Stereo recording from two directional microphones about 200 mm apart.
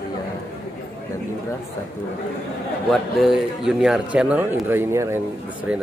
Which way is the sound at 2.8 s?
Centre (ahead or behind).